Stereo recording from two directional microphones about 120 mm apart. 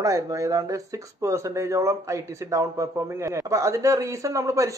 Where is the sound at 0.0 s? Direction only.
30° right (ahead or behind).